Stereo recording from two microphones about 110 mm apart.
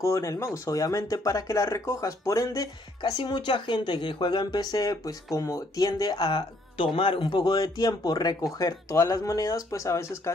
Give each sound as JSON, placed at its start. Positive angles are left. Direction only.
{"t": 0.0, "sound": "speech", "side_deg": 30}
{"t": 3.0, "sound": "speech", "side_deg": 45}